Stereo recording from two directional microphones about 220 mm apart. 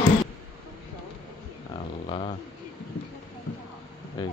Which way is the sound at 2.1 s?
25° left (ahead or behind).